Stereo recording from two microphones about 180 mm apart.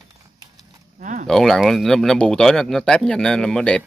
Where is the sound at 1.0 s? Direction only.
45° right (ahead or behind).